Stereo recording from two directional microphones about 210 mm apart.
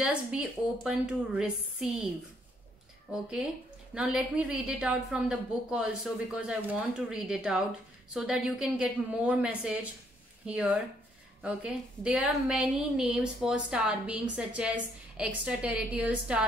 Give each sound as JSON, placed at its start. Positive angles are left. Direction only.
{"t": 0.0, "sound": "a woman's voice", "side_deg": -5}
{"t": 3.1, "sound": "a woman's voice", "side_deg": -5}